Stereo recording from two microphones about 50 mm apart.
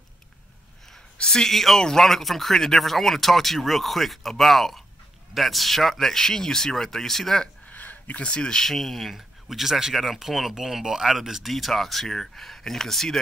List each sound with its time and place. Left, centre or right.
1.1 s speech: centre
7.7 s a sound: left
8.2 s speech: centre